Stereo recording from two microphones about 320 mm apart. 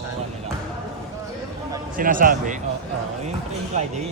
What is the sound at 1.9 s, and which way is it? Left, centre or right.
Speech, right.